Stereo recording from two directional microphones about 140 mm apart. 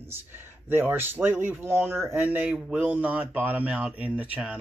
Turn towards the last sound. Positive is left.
turn(degrees=-10)  # may be behind; listen again after turning